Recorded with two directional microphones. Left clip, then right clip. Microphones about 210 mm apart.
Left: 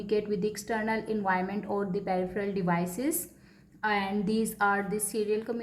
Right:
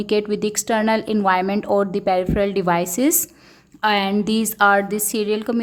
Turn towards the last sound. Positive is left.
turn(degrees=-45)  # may be behind; listen again after turning